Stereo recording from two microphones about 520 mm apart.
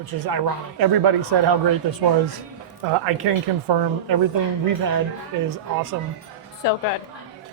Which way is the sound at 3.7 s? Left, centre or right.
Right.